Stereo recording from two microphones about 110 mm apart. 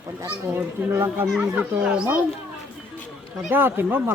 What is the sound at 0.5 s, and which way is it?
A child's voice, 20° right (ahead or behind).